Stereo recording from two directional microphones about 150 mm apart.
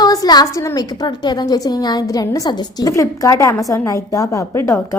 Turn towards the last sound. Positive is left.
turn(degrees=15)  # may be behind; listen again after turning